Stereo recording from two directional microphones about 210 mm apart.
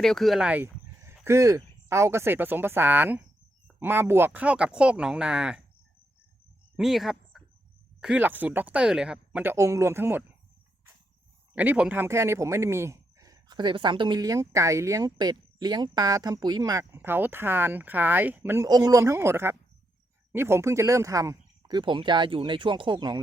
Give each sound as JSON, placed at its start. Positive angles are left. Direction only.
{"t": 0.0, "sound": "speech", "side_deg": 0}
{"t": 6.7, "sound": "speech", "side_deg": 0}
{"t": 11.5, "sound": "speech", "side_deg": -10}